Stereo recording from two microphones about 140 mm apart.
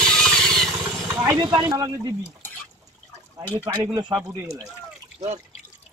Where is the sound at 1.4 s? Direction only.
25° right (ahead or behind).